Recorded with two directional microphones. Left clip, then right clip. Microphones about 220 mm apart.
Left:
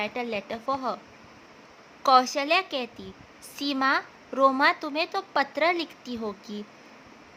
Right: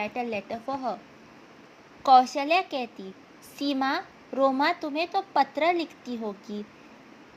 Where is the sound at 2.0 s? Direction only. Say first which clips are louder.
Right 2 dB; 10° left (ahead or behind).